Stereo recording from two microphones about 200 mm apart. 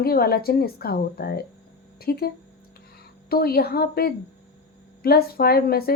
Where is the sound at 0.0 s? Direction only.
50° left (ahead or behind).